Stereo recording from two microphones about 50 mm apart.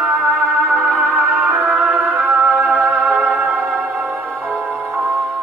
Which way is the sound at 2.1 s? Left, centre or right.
Right.